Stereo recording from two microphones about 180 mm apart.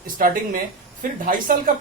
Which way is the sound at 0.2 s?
50° right (ahead or behind).